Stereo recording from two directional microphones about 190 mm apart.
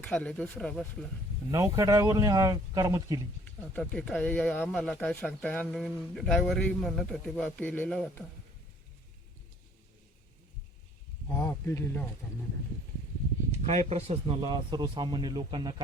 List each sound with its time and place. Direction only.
0.0 s speech: 5° left (ahead or behind)
1.5 s speech: 15° right (ahead or behind)
3.8 s speech: 5° left (ahead or behind)
11.3 s speech: 15° left (ahead or behind)
13.5 s speech: 35° right (ahead or behind)